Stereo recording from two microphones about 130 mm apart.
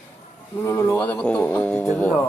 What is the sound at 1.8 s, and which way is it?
Music, 5° left (ahead or behind).